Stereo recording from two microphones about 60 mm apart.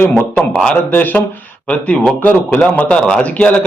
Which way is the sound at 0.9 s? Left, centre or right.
Left.